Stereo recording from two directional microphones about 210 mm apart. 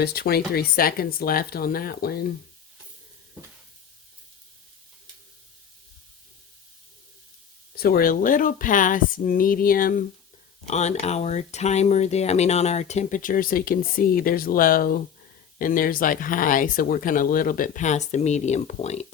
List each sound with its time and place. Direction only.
0.0 s speech: 50° left (ahead or behind)
7.8 s speech: 45° left (ahead or behind)